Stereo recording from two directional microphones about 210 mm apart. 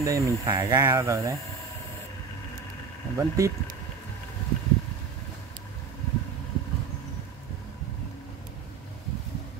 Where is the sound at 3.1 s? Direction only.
15° right (ahead or behind).